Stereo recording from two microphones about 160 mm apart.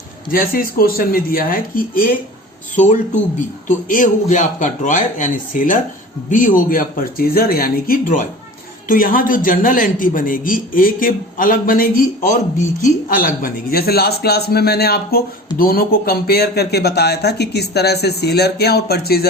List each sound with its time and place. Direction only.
0.3 s a man's voice: 65° left (ahead or behind)
2.7 s a man's voice: 50° left (ahead or behind); by 15.2 s 80° left
15.5 s speech: 65° left (ahead or behind)